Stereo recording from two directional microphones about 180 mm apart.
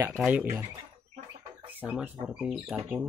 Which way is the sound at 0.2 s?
10° right (ahead or behind).